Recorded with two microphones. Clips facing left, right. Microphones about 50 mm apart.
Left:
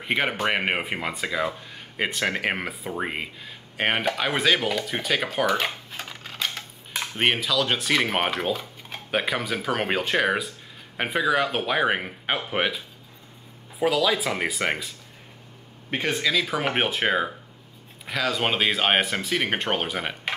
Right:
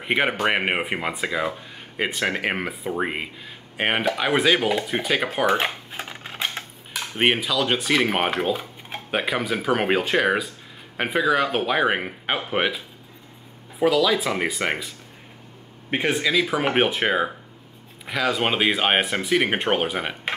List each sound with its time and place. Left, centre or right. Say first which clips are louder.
0.0 s speech: right 3 dB; centre
5.7 s a sound: right 2 dB; centre
7.2 s speech: right 2 dB; centre
13.8 s speech: right 3 dB; centre
14.3 s speech: right 2 dB; centre
15.9 s speech: right 3 dB; centre